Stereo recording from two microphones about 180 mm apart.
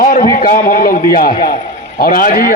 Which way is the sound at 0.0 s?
50° left (ahead or behind).